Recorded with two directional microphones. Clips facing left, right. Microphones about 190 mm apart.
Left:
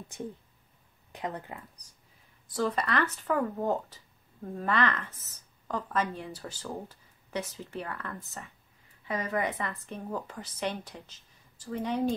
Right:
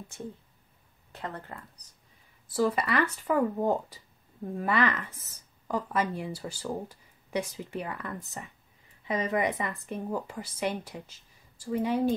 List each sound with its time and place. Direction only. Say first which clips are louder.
0.1 s speech: left 3 dB; 15° left (ahead or behind)
2.4 s speech: right 3 dB; 5° right (ahead or behind)